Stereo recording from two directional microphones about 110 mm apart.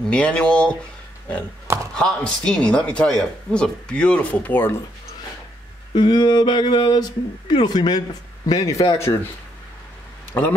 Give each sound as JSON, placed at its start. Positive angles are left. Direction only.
{"t": 0.1, "sound": "speech", "side_deg": 10}
{"t": 2.0, "sound": "speech", "side_deg": 5}
{"t": 5.9, "sound": "speech", "side_deg": 40}